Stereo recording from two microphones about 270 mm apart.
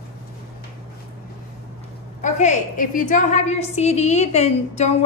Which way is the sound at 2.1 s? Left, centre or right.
Left.